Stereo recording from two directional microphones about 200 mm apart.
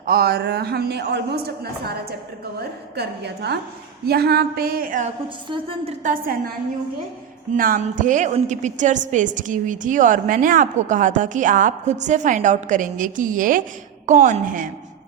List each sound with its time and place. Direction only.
0.0 s a man's voice: 50° right (ahead or behind)
5.5 s a woman's voice: 25° right (ahead or behind)
6.0 s a man's voice: 45° right (ahead or behind)
7.5 s a woman's voice: 45° right (ahead or behind)